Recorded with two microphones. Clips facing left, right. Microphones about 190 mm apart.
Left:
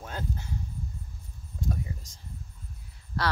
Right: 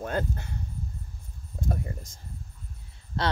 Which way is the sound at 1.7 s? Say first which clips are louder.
Right 2 dB; 55° right (ahead or behind).